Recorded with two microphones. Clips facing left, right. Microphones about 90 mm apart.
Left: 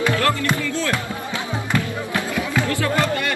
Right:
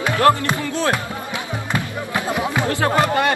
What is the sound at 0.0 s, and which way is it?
Music, 20° right (ahead or behind).